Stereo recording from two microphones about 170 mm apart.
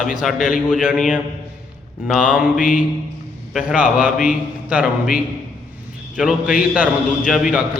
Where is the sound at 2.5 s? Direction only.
50° left (ahead or behind).